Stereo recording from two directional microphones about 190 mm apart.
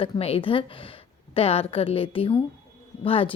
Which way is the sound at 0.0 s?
30° left (ahead or behind).